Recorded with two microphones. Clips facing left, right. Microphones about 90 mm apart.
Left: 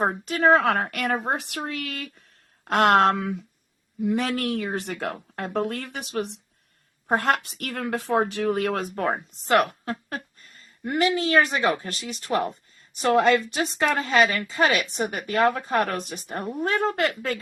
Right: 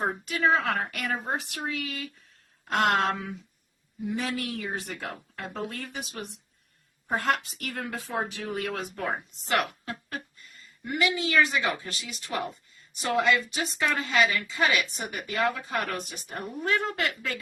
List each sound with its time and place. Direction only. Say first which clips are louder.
0.0 s a woman's voice: left 5 dB; 45° left (ahead or behind); by 6.4 s 70° left (ahead or behind)
7.1 s a woman's voice: left 4 dB; 60° left (ahead or behind)
14.4 s speech: left 4 dB; 40° left (ahead or behind)